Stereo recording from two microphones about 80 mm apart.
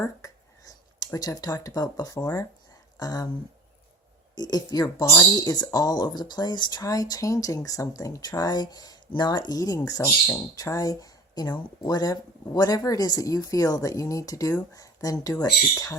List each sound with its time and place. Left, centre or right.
0.0 s a sound: left
2.2 s speech: left
4.4 s speech: left
6.8 s speech: left
15.7 s speech: left